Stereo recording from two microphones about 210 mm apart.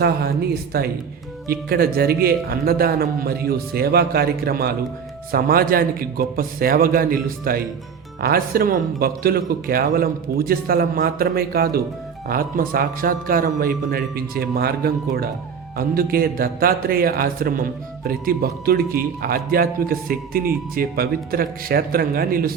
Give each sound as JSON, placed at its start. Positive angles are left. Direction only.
{"t": 0.0, "sound": "speech", "side_deg": -45}